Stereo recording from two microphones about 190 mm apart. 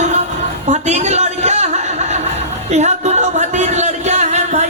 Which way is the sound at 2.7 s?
35° right (ahead or behind).